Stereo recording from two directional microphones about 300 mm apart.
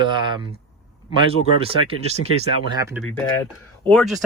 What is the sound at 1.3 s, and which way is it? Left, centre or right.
Speech, centre.